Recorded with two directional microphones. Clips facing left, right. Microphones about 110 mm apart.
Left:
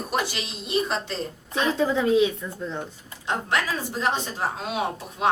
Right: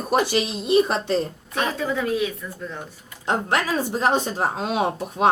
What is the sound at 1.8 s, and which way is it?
Speech, 20° left (ahead or behind).